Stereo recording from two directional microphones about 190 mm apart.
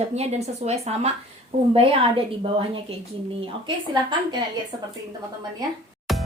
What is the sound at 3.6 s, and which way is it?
Speech, 25° right (ahead or behind).